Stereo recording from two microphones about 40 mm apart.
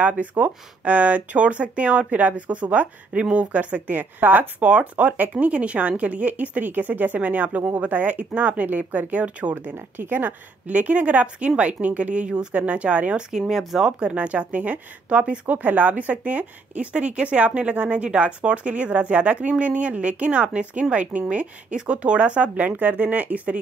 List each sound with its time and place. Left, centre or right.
0.0 s speech: right
4.0 s speech: right
4.6 s speech: right
9.9 s speech: right
10.7 s speech: right
13.3 s speech: centre
13.9 s speech: right
15.4 s speech: right
22.6 s speech: right